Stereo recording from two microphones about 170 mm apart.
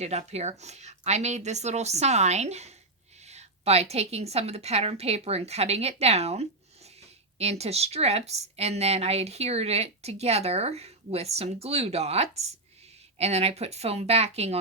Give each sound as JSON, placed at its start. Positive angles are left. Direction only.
{"t": 0.0, "sound": "speech", "side_deg": -40}
{"t": 7.6, "sound": "speech", "side_deg": -35}